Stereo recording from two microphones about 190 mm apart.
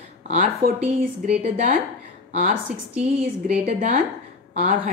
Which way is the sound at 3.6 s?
45° right (ahead or behind).